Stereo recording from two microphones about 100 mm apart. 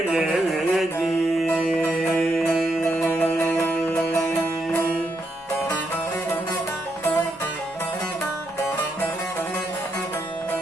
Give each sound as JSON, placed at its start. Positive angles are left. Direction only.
{"t": 0.1, "sound": "music", "side_deg": 0}
{"t": 3.4, "sound": "music", "side_deg": 25}